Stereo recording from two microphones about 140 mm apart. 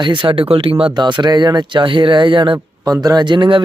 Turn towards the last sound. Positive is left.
turn(degrees=-35)  # may be behind; listen again after turning